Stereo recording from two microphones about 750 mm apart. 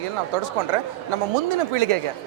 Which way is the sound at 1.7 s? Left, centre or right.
Right.